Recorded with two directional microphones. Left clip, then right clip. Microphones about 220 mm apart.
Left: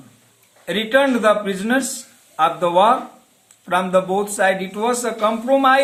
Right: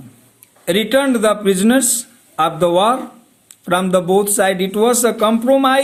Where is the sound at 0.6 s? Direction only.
45° right (ahead or behind).